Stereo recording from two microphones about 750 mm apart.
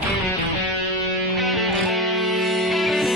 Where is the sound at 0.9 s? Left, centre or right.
Right.